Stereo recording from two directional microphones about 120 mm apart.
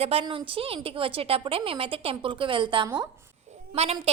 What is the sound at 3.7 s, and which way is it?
Speech, 60° right (ahead or behind).